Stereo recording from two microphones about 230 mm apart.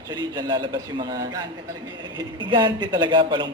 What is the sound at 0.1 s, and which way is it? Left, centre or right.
A man's voice, centre.